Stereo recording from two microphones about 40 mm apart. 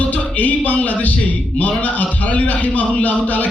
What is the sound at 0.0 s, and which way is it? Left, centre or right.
A man's voice, left.